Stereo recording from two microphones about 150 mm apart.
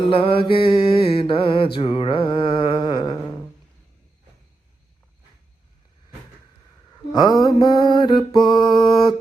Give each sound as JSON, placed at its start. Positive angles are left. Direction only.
{"t": 0.1, "sound": "mantra", "side_deg": 35}
{"t": 7.1, "sound": "mantra", "side_deg": 30}